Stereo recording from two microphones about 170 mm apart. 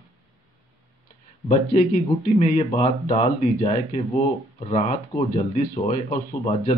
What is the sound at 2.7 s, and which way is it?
Speech, 40° left (ahead or behind).